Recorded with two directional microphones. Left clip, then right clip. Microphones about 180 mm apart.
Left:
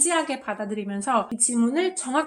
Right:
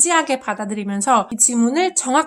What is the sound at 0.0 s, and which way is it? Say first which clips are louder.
Speech: right 7 dB; 30° right (ahead or behind).